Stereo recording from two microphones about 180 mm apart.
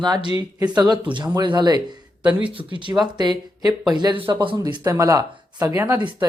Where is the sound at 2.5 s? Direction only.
25° right (ahead or behind); by 6.1 s 10° right (ahead or behind).